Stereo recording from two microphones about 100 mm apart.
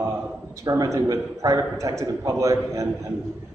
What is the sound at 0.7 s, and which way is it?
A man's voice, 35° right (ahead or behind).